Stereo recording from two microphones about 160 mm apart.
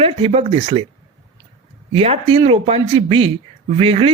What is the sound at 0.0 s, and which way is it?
Speech, 40° right (ahead or behind).